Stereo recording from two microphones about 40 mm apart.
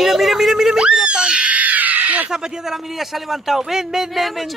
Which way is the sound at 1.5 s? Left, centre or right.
Right.